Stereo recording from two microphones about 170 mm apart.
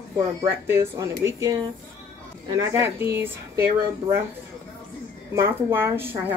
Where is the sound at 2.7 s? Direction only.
15° right (ahead or behind).